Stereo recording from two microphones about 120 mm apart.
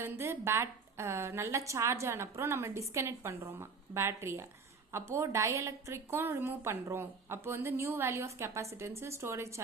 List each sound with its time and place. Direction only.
0.0 s a woman's voice: 20° right (ahead or behind)